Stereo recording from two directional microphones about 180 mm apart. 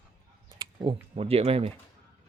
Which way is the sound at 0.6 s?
25° right (ahead or behind).